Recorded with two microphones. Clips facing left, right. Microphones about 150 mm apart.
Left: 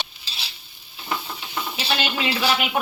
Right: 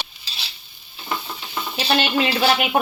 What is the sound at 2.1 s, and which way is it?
Speech, 45° right (ahead or behind).